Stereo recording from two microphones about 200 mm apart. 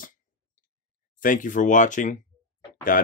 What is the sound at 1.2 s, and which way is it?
Speech, 40° left (ahead or behind).